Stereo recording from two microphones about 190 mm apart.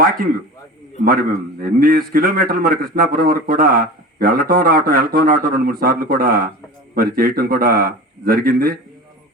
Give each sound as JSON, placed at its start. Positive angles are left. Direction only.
{"t": 1.0, "sound": "a man's voice", "side_deg": -50}